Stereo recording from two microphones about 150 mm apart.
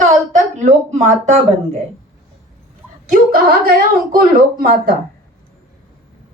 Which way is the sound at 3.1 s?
75° right (ahead or behind).